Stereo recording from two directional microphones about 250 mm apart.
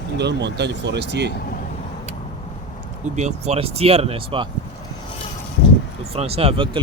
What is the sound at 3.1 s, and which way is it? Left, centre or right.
Speech, right.